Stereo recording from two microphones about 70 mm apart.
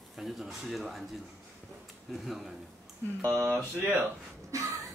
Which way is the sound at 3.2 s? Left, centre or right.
Right.